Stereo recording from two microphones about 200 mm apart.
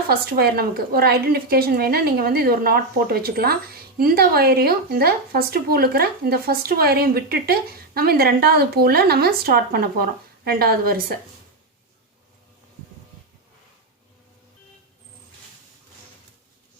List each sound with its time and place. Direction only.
0.1 s a woman's voice: 50° right (ahead or behind)